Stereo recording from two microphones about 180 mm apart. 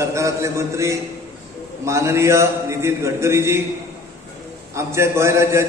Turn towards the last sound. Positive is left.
turn(degrees=-15)  # may be behind; listen again after turning